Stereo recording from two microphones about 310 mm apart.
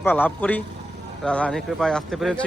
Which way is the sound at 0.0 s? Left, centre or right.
Centre.